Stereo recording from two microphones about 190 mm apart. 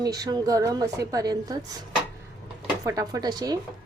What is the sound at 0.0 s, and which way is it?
A woman's voice, 20° right (ahead or behind).